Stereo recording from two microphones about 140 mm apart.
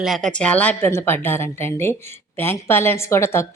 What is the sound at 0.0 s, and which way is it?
A woman's voice, centre (ahead or behind).